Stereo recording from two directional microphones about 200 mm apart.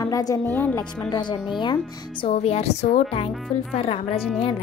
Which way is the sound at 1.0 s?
20° left (ahead or behind).